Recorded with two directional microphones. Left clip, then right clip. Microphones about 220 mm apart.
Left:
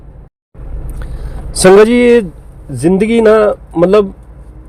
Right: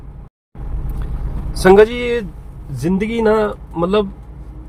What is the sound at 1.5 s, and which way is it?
Speech, 35° left (ahead or behind).